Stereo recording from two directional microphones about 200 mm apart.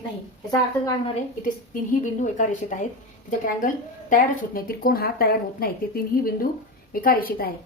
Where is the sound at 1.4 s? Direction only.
40° left (ahead or behind).